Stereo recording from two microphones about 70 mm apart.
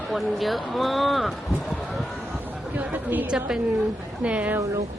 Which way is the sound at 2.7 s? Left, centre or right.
Right.